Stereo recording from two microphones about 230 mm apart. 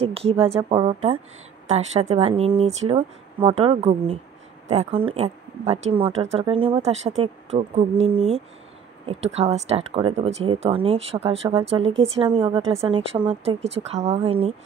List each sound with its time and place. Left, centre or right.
0.0 s a woman's voice: right